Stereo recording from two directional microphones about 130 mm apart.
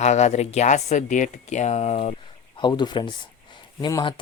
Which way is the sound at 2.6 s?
35° left (ahead or behind).